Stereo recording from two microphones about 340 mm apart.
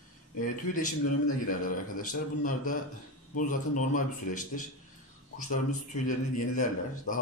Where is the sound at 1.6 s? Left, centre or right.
Left.